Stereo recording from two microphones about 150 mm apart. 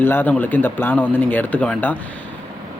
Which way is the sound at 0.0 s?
15° left (ahead or behind).